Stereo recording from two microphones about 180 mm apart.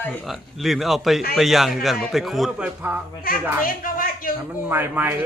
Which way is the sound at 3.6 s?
50° left (ahead or behind).